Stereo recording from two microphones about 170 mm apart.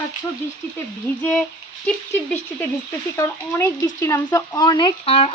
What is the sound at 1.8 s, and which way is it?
Speech, 5° left (ahead or behind).